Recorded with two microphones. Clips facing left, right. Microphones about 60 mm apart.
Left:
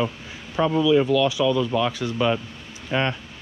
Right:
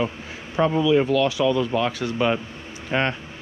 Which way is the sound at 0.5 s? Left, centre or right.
Right.